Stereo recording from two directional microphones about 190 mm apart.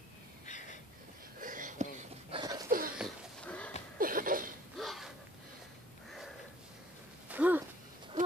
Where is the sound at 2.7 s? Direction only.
50° right (ahead or behind).